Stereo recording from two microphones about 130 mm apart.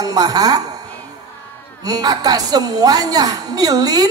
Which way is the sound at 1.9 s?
30° right (ahead or behind).